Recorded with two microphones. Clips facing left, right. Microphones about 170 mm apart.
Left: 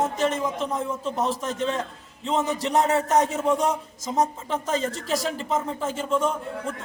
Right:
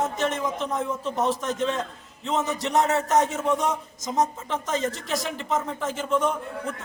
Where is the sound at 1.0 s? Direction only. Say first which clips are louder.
Right 2 dB; 5° right (ahead or behind).